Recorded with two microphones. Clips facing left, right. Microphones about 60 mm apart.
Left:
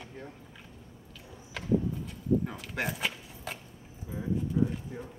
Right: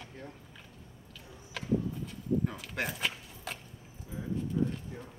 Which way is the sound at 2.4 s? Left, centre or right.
Centre.